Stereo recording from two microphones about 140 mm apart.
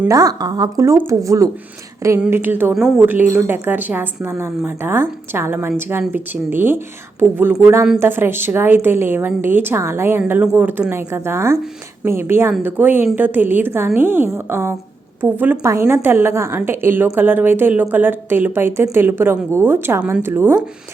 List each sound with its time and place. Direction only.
0.1 s a woman's voice: 25° right (ahead or behind)